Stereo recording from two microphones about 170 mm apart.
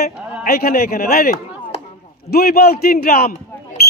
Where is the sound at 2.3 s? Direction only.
65° left (ahead or behind).